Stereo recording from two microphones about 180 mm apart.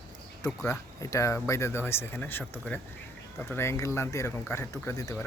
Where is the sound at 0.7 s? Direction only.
15° left (ahead or behind).